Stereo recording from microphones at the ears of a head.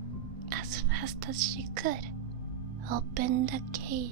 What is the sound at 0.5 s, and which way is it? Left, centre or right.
Speech, right.